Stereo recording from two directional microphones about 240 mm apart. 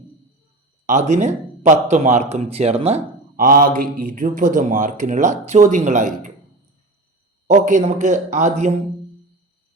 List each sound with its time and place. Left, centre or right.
0.9 s speech: right
7.4 s speech: right